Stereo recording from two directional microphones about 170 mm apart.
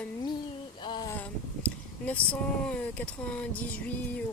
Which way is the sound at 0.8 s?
25° left (ahead or behind).